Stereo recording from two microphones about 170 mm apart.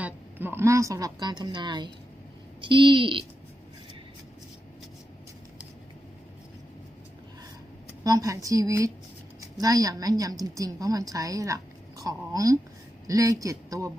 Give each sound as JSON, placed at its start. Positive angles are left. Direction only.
{"t": 0.0, "sound": "a woman's voice", "side_deg": -10}
{"t": 8.0, "sound": "a woman's voice", "side_deg": -20}